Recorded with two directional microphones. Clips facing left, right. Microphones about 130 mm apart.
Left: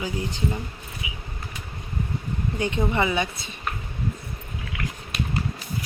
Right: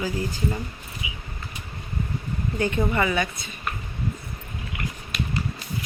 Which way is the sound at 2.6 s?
20° left (ahead or behind).